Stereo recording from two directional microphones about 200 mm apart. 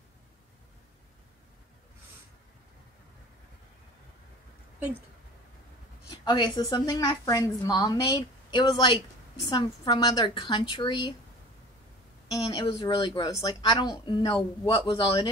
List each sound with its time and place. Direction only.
6.2 s a woman's voice: 20° left (ahead or behind)
12.6 s a woman's voice: 20° left (ahead or behind)